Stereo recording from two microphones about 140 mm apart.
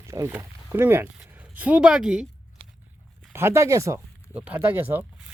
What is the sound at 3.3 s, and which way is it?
Speech, 20° right (ahead or behind).